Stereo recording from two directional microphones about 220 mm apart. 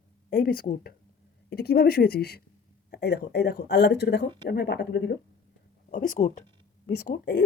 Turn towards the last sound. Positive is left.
turn(degrees=45)  # may be behind; listen again after turning